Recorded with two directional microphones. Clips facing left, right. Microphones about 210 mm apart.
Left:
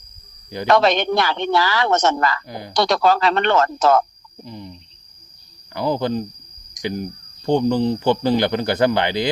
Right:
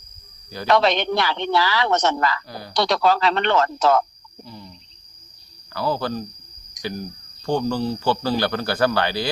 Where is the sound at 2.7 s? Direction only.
50° left (ahead or behind).